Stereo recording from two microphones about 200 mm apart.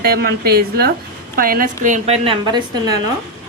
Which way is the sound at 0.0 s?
50° right (ahead or behind).